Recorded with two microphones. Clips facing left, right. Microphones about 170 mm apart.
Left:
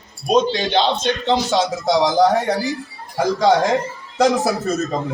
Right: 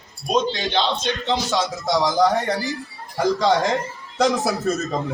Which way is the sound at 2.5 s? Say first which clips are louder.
Left 4 dB; centre (ahead or behind).